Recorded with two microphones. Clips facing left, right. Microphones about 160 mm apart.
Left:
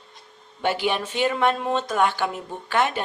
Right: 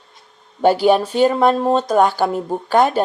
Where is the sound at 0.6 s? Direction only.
40° right (ahead or behind).